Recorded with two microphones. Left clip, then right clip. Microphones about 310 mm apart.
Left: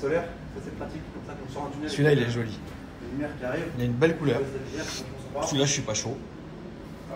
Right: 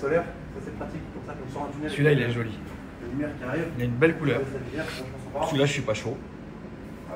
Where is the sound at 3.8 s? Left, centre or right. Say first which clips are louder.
Right 2 dB; centre.